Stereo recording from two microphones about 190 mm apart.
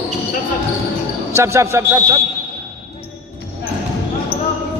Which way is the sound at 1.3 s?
15° right (ahead or behind).